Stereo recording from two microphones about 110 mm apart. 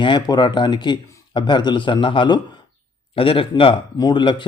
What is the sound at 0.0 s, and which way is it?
A man's voice, 45° left (ahead or behind).